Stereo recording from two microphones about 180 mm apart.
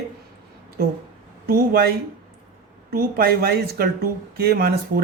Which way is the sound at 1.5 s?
55° right (ahead or behind).